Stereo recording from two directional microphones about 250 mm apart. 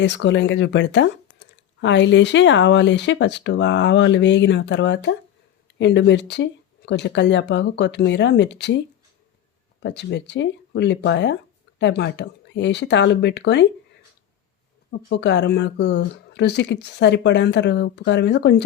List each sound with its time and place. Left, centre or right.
0.0 s speech: left
9.8 s speech: left
14.8 s speech: left